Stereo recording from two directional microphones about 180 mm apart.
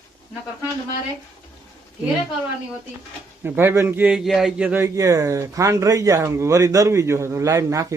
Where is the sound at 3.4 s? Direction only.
10° right (ahead or behind).